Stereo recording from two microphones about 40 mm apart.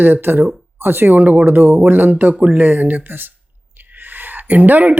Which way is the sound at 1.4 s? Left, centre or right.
Right.